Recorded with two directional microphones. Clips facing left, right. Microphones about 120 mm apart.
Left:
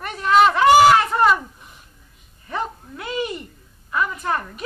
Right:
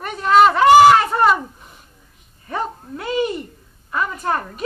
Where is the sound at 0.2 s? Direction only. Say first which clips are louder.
Right 3 dB; 35° right (ahead or behind).